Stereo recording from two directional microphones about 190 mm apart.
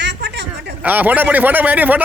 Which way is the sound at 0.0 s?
65° right (ahead or behind).